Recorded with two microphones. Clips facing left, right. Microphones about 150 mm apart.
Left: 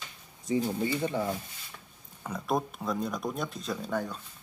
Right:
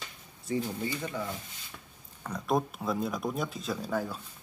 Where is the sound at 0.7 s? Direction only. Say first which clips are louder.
Left 5 dB; 25° left (ahead or behind).